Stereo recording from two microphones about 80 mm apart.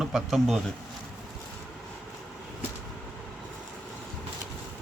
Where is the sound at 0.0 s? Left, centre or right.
Centre.